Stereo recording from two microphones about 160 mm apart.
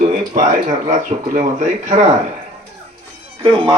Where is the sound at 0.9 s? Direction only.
55° right (ahead or behind).